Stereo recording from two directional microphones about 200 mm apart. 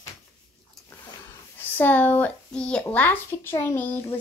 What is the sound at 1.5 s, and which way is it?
Speech, 10° left (ahead or behind).